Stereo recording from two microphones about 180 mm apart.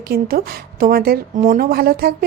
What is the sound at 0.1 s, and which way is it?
A woman's voice, 55° right (ahead or behind).